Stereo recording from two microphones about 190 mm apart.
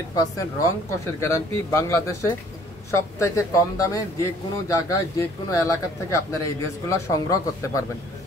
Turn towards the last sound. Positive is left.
turn(degrees=15)  # may be behind; listen again after turning